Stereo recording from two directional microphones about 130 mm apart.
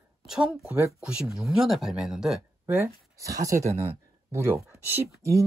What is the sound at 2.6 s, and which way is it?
Speech, 20° right (ahead or behind).